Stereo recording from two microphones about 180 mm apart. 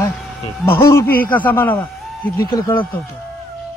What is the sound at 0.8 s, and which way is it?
Speech, 15° left (ahead or behind).